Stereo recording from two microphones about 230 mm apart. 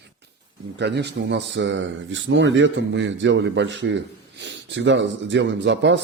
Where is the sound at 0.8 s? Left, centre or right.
Right.